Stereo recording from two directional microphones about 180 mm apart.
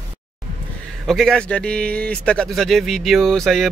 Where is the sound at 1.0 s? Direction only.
Centre (ahead or behind).